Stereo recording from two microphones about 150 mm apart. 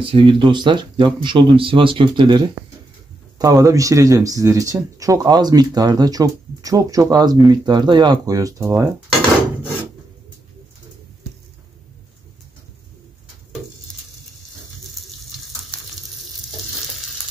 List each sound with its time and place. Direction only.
0.0 s speech: 35° right (ahead or behind); by 8.9 s 20° right (ahead or behind)